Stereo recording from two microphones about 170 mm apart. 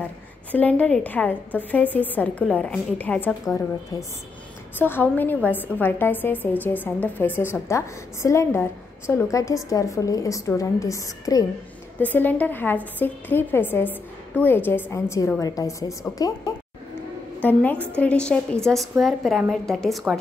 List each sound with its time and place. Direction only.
0.5 s a woman's voice: 10° left (ahead or behind)
3.9 s a woman's voice: 20° left (ahead or behind)
17.4 s a woman's voice: 10° left (ahead or behind)